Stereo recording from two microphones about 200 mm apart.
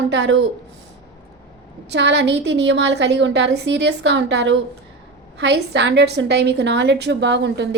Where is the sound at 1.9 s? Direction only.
60° right (ahead or behind).